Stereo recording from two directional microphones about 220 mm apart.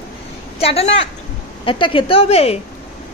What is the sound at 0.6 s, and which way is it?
A woman's voice, 25° left (ahead or behind).